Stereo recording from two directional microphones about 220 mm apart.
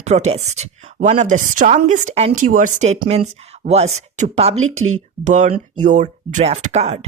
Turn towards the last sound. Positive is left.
turn(degrees=-30)  # may be behind; listen again after turning